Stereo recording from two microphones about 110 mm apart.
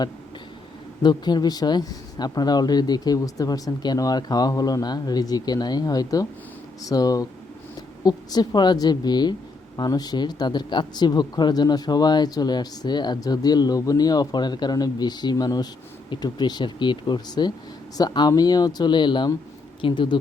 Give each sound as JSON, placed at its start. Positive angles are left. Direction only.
{"t": 1.0, "sound": "speech", "side_deg": 40}